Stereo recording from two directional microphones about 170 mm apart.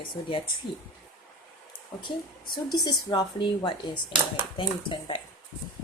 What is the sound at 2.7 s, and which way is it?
A woman's voice, 25° left (ahead or behind).